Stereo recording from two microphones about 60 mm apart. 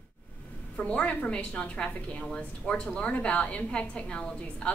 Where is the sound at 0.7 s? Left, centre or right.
Centre.